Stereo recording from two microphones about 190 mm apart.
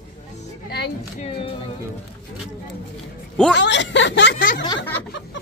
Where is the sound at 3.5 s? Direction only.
65° left (ahead or behind).